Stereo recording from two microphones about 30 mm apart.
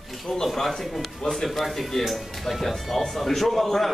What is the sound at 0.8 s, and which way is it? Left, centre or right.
A man's voice, centre.